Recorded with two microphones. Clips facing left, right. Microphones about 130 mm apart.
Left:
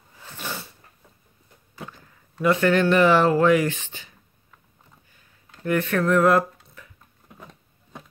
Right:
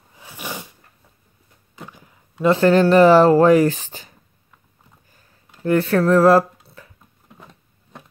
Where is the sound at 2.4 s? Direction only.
30° right (ahead or behind).